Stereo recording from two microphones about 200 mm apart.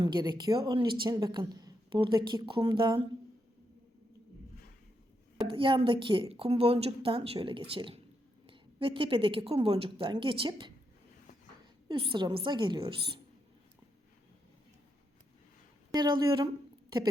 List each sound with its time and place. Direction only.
0.0 s a woman's voice: 20° right (ahead or behind)
5.5 s a woman's voice: 25° right (ahead or behind)
11.9 s a woman's voice: 25° right (ahead or behind)
15.9 s a woman's voice: 20° right (ahead or behind)